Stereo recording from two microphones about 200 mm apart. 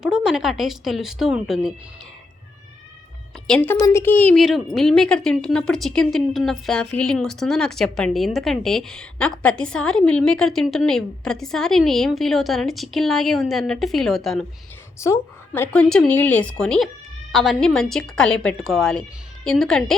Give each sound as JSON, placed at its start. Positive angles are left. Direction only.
{"t": 0.0, "sound": "a woman's voice", "side_deg": -5}
{"t": 3.4, "sound": "a woman's voice", "side_deg": 5}
{"t": 14.9, "sound": "a woman's voice", "side_deg": 15}